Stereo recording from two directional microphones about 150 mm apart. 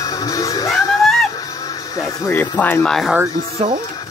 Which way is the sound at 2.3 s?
10° left (ahead or behind).